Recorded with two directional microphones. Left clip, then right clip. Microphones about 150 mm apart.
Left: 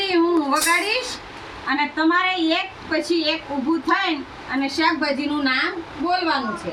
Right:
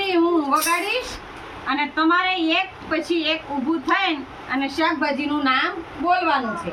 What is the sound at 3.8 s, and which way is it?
A woman's voice, centre (ahead or behind).